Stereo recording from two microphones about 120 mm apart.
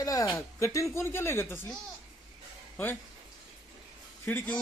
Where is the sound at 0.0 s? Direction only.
30° left (ahead or behind).